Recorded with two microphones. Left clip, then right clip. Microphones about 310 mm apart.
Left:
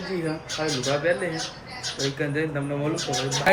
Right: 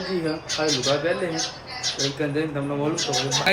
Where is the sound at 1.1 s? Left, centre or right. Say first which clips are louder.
Even; centre.